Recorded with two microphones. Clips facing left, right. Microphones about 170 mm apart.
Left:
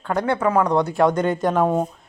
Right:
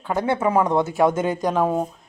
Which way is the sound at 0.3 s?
20° right (ahead or behind).